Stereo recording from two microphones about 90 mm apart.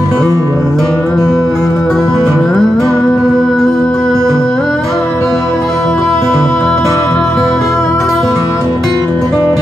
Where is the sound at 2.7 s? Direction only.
35° left (ahead or behind).